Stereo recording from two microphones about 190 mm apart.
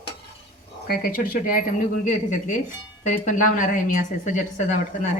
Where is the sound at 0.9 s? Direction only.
45° left (ahead or behind).